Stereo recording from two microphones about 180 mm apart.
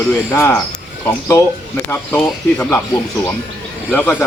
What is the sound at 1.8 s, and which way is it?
Speech, 10° left (ahead or behind).